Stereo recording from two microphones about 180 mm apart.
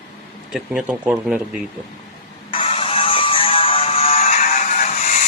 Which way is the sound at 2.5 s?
30° left (ahead or behind).